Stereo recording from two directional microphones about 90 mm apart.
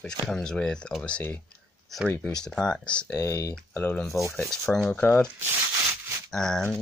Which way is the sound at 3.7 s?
20° left (ahead or behind).